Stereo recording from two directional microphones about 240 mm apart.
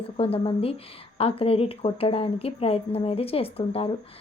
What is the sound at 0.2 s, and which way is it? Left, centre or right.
A woman's voice, left.